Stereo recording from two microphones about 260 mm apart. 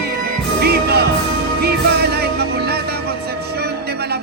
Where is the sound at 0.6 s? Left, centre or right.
Right.